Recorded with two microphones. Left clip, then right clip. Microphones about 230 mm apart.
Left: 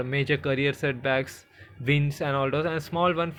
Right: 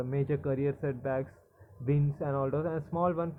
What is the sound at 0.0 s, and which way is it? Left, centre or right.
Speech, left.